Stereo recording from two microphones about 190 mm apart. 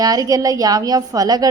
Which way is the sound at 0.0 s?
20° right (ahead or behind).